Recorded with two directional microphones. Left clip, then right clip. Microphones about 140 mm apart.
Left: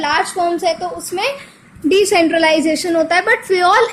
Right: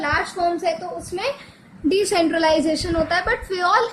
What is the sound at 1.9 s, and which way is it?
A woman's voice, 25° left (ahead or behind).